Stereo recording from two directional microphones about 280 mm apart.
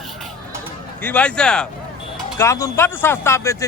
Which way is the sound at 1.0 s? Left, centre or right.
Centre.